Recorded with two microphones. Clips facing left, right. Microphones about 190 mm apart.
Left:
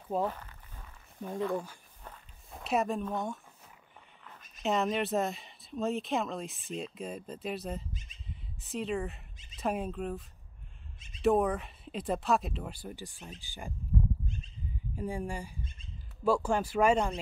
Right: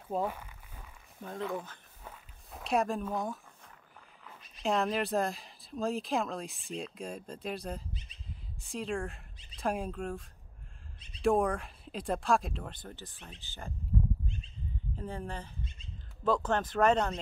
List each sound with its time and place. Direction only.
0.1 s a sound: 10° right (ahead or behind)
1.2 s speech: 15° left (ahead or behind)
2.0 s walk: centre (ahead or behind)
4.6 s speech: centre (ahead or behind)
7.9 s speech: 45° left (ahead or behind)
8.3 s speech: centre (ahead or behind)
15.0 s speech: 10° left (ahead or behind)